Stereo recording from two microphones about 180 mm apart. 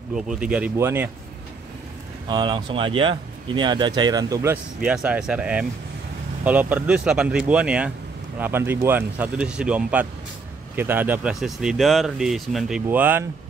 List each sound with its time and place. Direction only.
0.1 s speech: 5° right (ahead or behind)
2.2 s speech: 25° right (ahead or behind)
4.8 s speech: 5° right (ahead or behind)